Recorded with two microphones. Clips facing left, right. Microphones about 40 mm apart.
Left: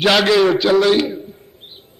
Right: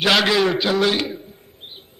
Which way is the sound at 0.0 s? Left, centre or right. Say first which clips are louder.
Left 4 dB; centre.